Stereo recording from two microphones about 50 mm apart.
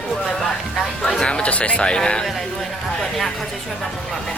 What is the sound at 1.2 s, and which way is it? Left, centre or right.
Speech, centre.